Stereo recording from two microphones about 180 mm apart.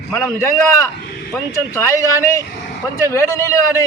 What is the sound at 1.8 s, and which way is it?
A man's voice, 15° left (ahead or behind).